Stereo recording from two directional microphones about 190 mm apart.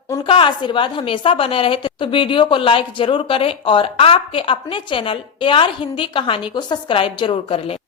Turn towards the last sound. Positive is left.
turn(degrees=30)  # may be behind; listen again after turning